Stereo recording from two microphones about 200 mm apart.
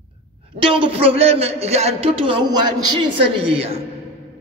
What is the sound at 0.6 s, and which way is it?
A man's voice, 25° right (ahead or behind).